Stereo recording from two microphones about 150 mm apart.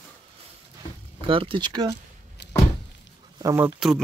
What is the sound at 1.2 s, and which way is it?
Speech, 35° right (ahead or behind).